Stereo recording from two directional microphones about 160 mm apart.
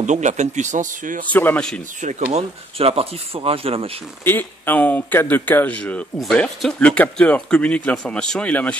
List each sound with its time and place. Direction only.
0.0 s speech: 50° right (ahead or behind)
1.3 s speech: 10° left (ahead or behind)
2.0 s speech: 45° right (ahead or behind)
4.2 s speech: 10° left (ahead or behind)